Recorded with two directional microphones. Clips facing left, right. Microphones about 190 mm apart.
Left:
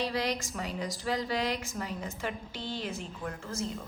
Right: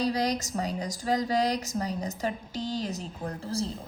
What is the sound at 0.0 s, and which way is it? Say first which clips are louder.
Speech: right 4 dB; 40° right (ahead or behind).